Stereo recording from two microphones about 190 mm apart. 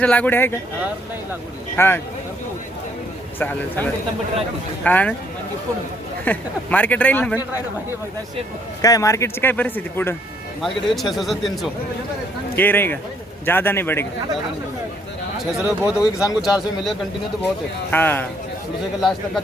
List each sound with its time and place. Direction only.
0.0 s speech: 10° left (ahead or behind)
1.7 s speech: 10° left (ahead or behind)
3.3 s speech: 10° left (ahead or behind)
6.2 s speech: 10° left (ahead or behind)
8.8 s speech: 20° left (ahead or behind); by 11.7 s centre (ahead or behind)
12.5 s speech: 10° left (ahead or behind)
15.5 s speech: 5° right (ahead or behind)
16.0 s speech: 20° left (ahead or behind)
16.4 s speech: centre (ahead or behind)
17.9 s speech: 10° left (ahead or behind)